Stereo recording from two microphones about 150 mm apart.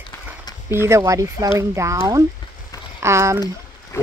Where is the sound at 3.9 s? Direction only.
15° left (ahead or behind).